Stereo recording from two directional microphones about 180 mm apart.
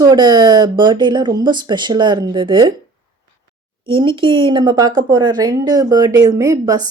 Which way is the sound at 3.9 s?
30° right (ahead or behind).